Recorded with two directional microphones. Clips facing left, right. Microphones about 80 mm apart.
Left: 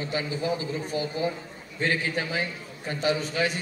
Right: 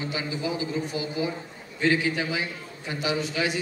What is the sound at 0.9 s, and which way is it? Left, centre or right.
A man's voice, left.